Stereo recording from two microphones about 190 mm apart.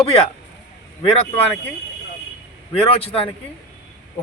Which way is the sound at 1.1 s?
30° left (ahead or behind).